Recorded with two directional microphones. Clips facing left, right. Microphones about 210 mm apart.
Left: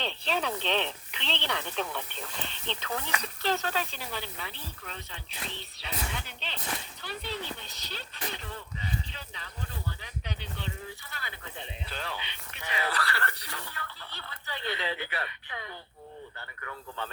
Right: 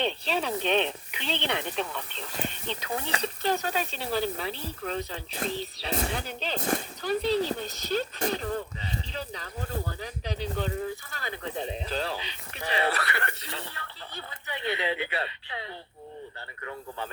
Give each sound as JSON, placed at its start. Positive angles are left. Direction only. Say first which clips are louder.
{"t": 0.3, "sound": "speech", "louder": "right 2 dB", "side_deg": 0}
{"t": 0.6, "sound": "speech", "louder": "right 5 dB", "side_deg": -15}
{"t": 1.7, "sound": "speech", "louder": "right 1 dB", "side_deg": 0}
{"t": 2.4, "sound": "speech", "louder": "right 5 dB", "side_deg": -10}
{"t": 4.0, "sound": "speech", "louder": "right 10 dB", "side_deg": -35}